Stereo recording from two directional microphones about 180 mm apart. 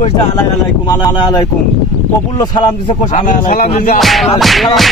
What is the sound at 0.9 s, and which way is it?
Speech, 20° left (ahead or behind).